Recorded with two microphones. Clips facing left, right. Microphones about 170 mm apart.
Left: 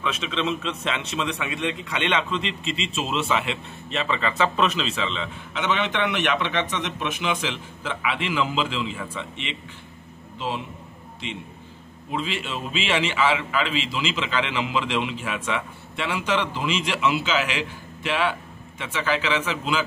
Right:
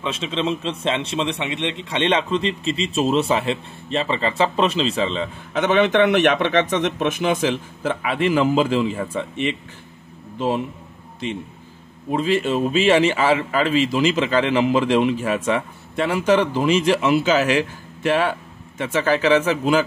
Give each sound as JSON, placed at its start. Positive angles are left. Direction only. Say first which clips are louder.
{"t": 0.0, "sound": "a man's voice", "louder": "right 3 dB", "side_deg": -30}
{"t": 12.1, "sound": "a man's voice", "louder": "right 9 dB", "side_deg": -45}